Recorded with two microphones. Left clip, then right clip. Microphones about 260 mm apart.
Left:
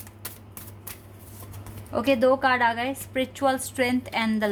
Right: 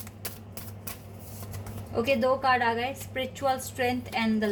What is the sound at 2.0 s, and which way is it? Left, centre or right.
A woman's voice, left.